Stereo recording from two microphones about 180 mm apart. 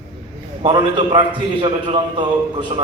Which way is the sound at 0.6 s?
25° right (ahead or behind).